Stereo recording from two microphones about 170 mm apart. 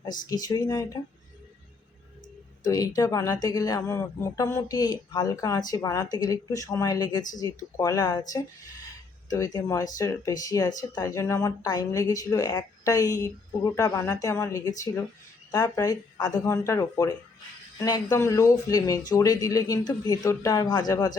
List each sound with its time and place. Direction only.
0.3 s speech: 20° left (ahead or behind)
2.6 s speech: 20° left (ahead or behind)
9.3 s speech: 25° left (ahead or behind)